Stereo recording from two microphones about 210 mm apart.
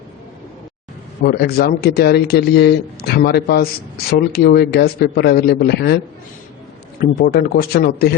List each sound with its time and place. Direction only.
1.2 s a man's voice: 50° left (ahead or behind)
7.0 s a man's voice: 45° left (ahead or behind)